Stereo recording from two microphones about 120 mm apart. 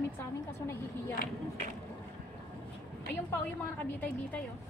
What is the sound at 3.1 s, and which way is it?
A woman's voice, 15° left (ahead or behind).